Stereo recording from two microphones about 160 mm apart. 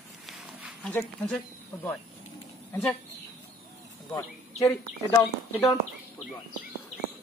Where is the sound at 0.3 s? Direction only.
Centre (ahead or behind).